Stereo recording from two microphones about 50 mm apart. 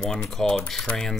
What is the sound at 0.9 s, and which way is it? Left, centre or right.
Speech, left.